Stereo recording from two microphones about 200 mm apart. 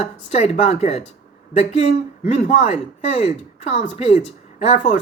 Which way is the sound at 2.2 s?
35° left (ahead or behind).